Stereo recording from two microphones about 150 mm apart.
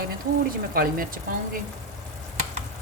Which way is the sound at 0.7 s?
75° right (ahead or behind).